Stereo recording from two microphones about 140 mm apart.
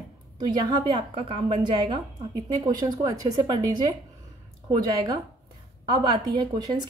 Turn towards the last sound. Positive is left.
turn(degrees=-30)  # may be behind; listen again after turning